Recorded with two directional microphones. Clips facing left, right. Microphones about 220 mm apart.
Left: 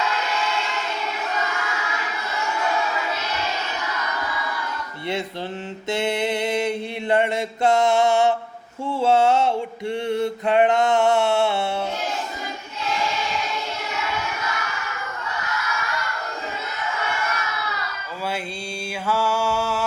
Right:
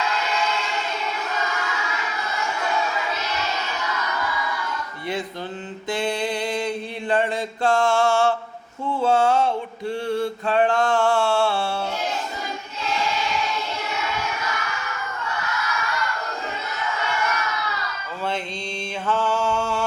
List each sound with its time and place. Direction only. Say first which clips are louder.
5.9 s mantra: left 2 dB; 25° left (ahead or behind)
9.0 s a sound: left 1 dB; 25° left (ahead or behind)
19.0 s mantra: even; 10° left (ahead or behind)